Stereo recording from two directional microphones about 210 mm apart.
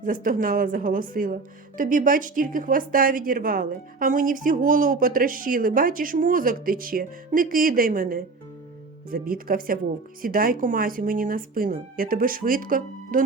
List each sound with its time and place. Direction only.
0.0 s speech: 40° right (ahead or behind)